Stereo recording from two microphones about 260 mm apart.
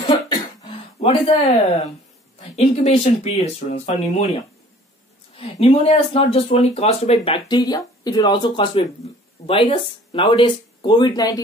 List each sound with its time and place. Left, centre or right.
0.9 s speech: left
2.5 s speech: left
5.4 s speech: left